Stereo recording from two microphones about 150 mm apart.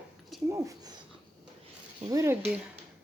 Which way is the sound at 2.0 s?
20° right (ahead or behind).